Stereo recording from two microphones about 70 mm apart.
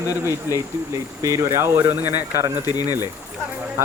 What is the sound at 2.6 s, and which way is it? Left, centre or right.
Speech, left.